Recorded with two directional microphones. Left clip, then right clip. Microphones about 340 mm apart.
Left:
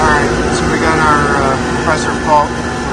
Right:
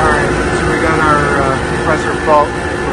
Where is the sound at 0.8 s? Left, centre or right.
Centre.